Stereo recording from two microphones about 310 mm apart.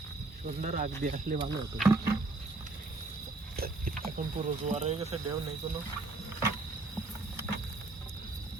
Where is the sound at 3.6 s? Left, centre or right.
Right.